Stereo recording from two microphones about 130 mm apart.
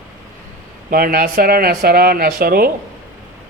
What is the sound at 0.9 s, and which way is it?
Speech, 90° right.